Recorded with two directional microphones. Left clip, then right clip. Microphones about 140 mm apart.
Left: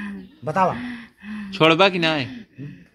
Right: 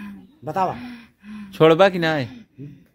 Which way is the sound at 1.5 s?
65° right (ahead or behind).